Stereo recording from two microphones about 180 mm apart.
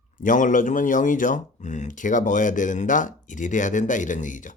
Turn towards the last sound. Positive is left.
turn(degrees=45)  # may be behind; listen again after turning